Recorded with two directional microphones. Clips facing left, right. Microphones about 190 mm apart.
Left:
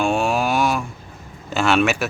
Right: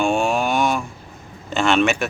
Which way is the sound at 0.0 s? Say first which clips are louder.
Even; centre (ahead or behind).